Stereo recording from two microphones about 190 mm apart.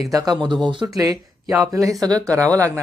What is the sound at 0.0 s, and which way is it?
Speech, 20° right (ahead or behind).